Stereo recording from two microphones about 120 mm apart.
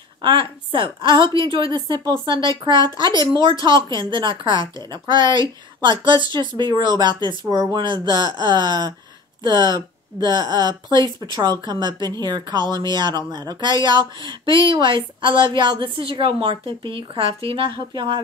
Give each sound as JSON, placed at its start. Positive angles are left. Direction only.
{"t": 0.2, "sound": "speech", "side_deg": -40}